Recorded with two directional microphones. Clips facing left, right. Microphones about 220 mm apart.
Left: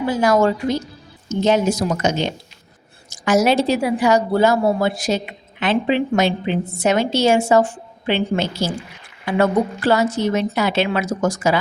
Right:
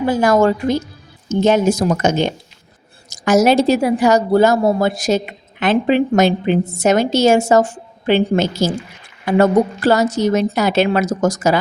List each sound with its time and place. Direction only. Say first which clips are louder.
0.1 s a woman's voice: right 2 dB; 50° right (ahead or behind)